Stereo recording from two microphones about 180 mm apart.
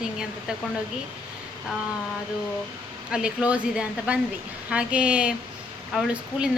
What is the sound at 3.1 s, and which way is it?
A woman's voice, 5° right (ahead or behind).